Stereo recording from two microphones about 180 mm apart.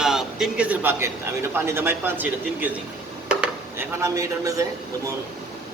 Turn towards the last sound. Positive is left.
turn(degrees=-15)  # may be behind; listen again after turning